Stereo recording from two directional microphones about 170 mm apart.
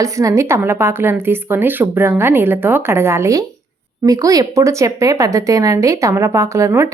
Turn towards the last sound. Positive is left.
turn(degrees=-15)  # may be behind; listen again after turning